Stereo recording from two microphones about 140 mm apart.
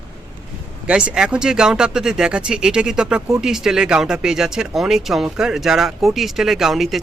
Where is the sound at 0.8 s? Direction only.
5° right (ahead or behind).